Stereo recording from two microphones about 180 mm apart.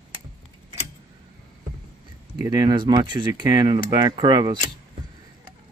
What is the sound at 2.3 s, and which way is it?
Speech, 20° right (ahead or behind).